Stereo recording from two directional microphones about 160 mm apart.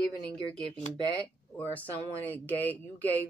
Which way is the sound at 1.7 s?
10° left (ahead or behind).